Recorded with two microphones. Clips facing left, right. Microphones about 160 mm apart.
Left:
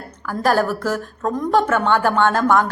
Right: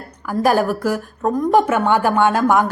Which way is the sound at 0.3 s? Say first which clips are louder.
Right 2 dB; 15° right (ahead or behind).